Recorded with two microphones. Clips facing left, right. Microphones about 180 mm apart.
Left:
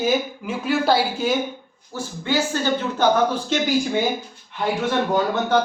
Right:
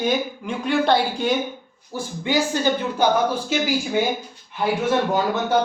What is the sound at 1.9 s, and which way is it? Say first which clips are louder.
Speech: right 1 dB; 15° right (ahead or behind).